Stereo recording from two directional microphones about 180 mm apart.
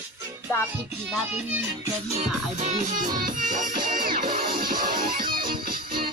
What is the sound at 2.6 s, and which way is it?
Music, 40° right (ahead or behind).